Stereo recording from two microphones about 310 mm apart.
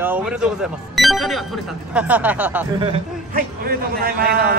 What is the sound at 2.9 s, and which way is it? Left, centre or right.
A man's voice, right.